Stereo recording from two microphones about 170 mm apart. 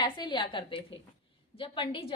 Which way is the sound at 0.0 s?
25° left (ahead or behind).